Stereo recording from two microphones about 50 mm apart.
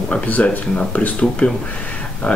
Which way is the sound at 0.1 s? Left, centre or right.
Left.